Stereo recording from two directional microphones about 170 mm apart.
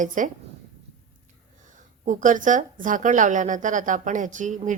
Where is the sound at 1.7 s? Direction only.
50° right (ahead or behind).